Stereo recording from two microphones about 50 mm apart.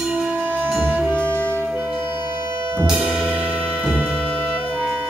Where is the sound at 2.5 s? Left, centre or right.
Right.